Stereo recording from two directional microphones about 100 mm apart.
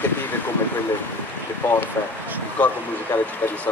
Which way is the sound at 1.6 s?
20° left (ahead or behind).